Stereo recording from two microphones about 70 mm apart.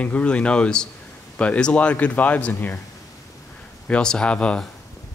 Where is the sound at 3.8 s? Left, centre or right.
Centre.